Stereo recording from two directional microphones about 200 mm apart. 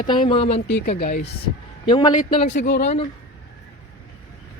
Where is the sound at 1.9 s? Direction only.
20° left (ahead or behind).